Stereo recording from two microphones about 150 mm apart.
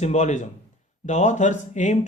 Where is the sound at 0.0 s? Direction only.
50° left (ahead or behind).